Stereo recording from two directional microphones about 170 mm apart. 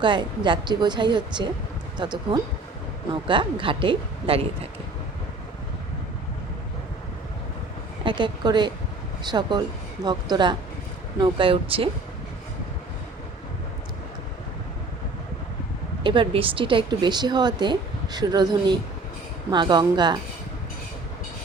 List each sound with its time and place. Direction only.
0.0 s a woman's voice: 30° right (ahead or behind)
8.0 s a woman's voice: 25° right (ahead or behind)
16.0 s speech: 30° right (ahead or behind)